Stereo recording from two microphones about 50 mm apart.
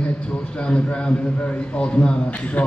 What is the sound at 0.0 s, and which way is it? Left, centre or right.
A man's voice, centre.